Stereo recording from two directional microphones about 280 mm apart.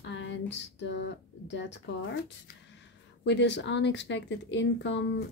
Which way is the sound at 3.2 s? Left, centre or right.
Left.